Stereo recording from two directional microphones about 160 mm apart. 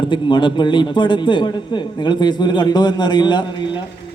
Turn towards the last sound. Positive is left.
turn(degrees=25)  # may be behind; listen again after turning